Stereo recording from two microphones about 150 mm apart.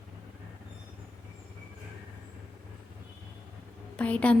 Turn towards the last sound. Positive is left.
turn(degrees=10)  # may be behind; listen again after turning